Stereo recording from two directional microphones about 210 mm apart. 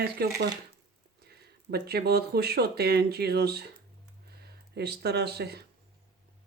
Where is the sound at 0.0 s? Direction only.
50° right (ahead or behind).